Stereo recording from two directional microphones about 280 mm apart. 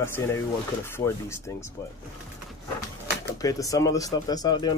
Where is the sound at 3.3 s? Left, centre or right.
Centre.